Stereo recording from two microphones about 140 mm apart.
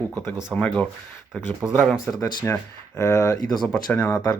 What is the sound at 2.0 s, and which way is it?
Speech, 25° left (ahead or behind).